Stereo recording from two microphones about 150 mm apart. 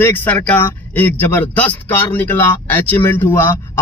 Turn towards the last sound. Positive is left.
turn(degrees=15)  # may be behind; listen again after turning